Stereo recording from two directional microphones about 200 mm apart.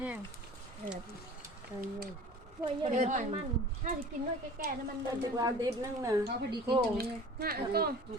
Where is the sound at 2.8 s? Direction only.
35° right (ahead or behind).